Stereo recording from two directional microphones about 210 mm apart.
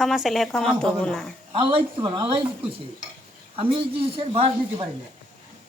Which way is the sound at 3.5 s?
25° right (ahead or behind).